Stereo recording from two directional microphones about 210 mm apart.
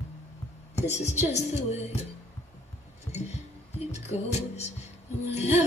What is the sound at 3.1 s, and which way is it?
Music, 30° left (ahead or behind).